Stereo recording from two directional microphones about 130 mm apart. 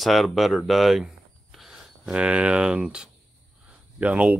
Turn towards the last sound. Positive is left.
turn(degrees=-10)  # may be behind; listen again after turning